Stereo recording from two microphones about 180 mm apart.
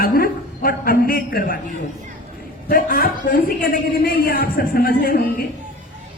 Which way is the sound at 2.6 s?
55° left (ahead or behind).